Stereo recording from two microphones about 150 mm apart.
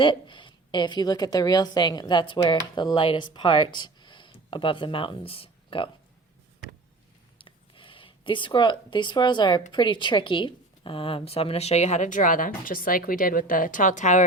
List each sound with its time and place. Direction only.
0.0 s a woman's voice: 30° left (ahead or behind)
7.3 s a sound: 35° left (ahead or behind)
9.7 s a woman's voice: 30° left (ahead or behind); by 14.3 s 55° left (ahead or behind)